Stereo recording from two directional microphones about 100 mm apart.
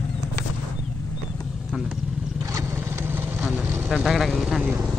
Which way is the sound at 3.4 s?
20° right (ahead or behind).